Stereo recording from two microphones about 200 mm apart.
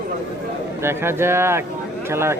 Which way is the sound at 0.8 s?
10° right (ahead or behind).